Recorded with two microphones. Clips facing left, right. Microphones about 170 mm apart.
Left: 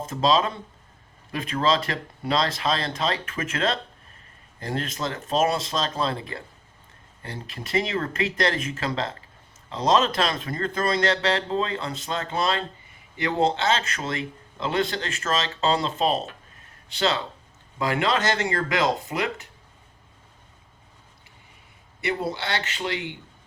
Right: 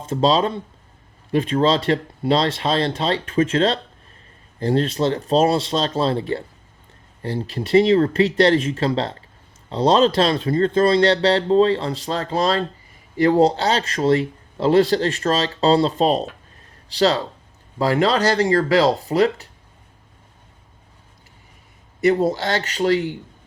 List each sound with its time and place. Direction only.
0.0 s speech: 30° right (ahead or behind)
22.0 s speech: 40° right (ahead or behind)